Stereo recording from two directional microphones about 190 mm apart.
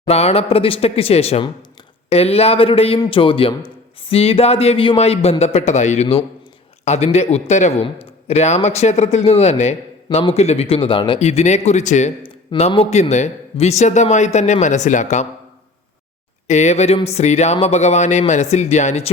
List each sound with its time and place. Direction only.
0.0 s a man's voice: 35° left (ahead or behind)
16.5 s a man's voice: 35° left (ahead or behind)